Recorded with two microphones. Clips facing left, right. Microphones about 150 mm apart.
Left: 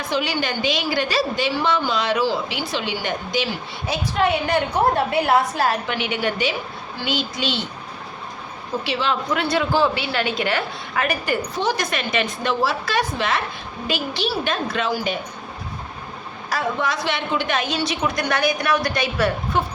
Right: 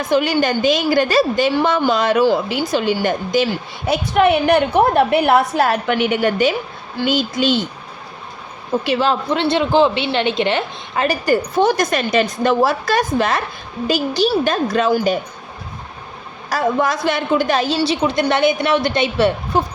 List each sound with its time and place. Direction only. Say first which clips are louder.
0.1 s a woman's voice: right 8 dB; 50° right (ahead or behind)
3.8 s a woman's voice: right 6 dB; 70° right (ahead or behind); by 7.6 s 45° right (ahead or behind)
8.8 s a woman's voice: right 6 dB; 45° right (ahead or behind)
9.3 s a woman's voice: right 4 dB; 25° right (ahead or behind)
11.5 s a woman's voice: right 7 dB; 50° right (ahead or behind)
16.5 s a woman's voice: right 6 dB; 45° right (ahead or behind); by 19.6 s 25° right (ahead or behind)